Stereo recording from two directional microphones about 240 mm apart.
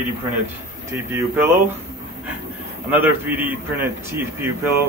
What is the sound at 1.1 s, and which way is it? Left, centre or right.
Speech, centre.